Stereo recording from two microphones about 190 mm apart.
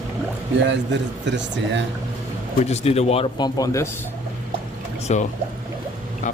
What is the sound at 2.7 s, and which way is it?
Speech, 35° left (ahead or behind).